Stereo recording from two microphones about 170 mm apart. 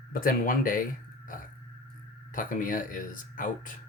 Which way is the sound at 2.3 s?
50° left (ahead or behind).